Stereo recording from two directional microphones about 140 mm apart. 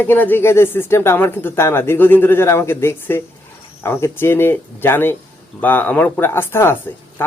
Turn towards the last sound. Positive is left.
turn(degrees=15)  # may be behind; listen again after turning